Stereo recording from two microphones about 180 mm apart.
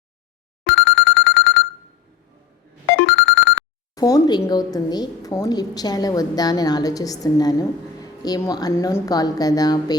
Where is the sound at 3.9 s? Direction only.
20° left (ahead or behind).